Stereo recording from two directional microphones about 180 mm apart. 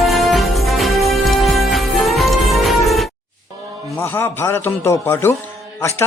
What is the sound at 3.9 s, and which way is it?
Speech, 10° left (ahead or behind).